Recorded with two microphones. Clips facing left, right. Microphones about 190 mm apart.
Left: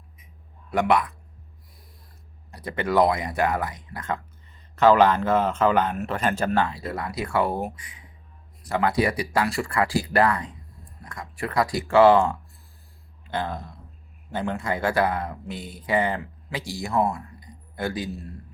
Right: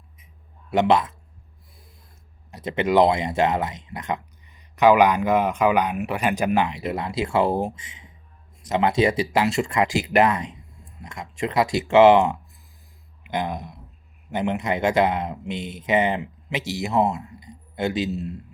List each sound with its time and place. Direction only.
0.7 s speech: 25° right (ahead or behind)
2.5 s speech: 20° right (ahead or behind)